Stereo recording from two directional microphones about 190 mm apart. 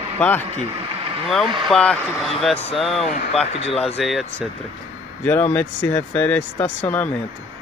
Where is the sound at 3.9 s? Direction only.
Centre (ahead or behind).